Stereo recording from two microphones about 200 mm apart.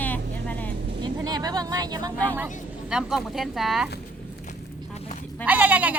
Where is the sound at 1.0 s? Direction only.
20° right (ahead or behind).